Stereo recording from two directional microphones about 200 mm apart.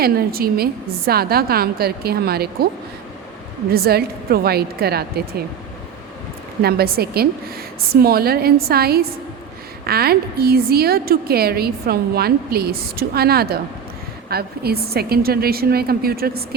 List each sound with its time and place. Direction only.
0.0 s a woman's voice: 50° right (ahead or behind)
3.7 s a woman's voice: 50° right (ahead or behind)
6.6 s a woman's voice: 50° right (ahead or behind)